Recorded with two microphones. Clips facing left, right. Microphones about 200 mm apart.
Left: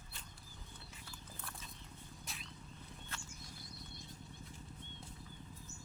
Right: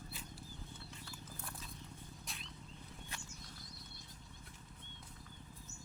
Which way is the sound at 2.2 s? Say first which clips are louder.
Even; centre (ahead or behind).